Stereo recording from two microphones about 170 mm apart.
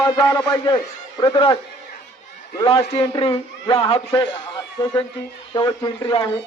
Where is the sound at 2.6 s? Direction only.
35° left (ahead or behind).